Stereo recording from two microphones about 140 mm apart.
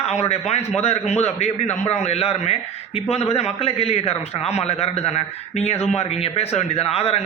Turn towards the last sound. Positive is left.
turn(degrees=45)  # may be behind; listen again after turning